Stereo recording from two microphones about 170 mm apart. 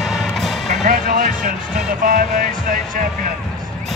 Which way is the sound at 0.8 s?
55° right (ahead or behind).